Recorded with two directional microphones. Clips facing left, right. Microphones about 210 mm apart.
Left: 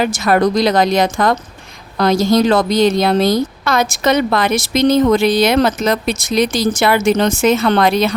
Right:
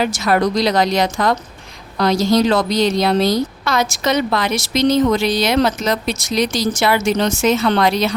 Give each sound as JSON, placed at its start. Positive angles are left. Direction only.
{"t": 0.0, "sound": "a woman's voice", "side_deg": 50}